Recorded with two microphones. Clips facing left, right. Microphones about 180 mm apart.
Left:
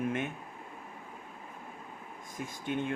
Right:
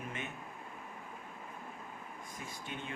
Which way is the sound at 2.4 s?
55° left (ahead or behind).